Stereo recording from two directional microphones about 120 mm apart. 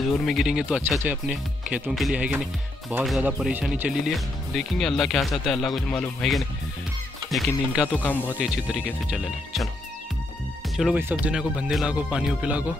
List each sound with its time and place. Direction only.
0.2 s speech: centre (ahead or behind)
4.6 s speech: 5° left (ahead or behind)
7.8 s speech: 15° left (ahead or behind)
8.4 s speech: 5° right (ahead or behind)
11.0 s speech: 20° right (ahead or behind)
11.3 s speech: 5° right (ahead or behind)